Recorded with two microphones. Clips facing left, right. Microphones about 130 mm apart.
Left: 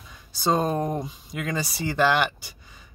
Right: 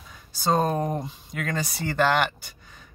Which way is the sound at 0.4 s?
Centre (ahead or behind).